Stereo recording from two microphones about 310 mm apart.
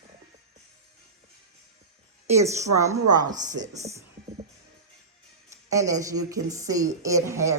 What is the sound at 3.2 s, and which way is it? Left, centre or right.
Speech, right.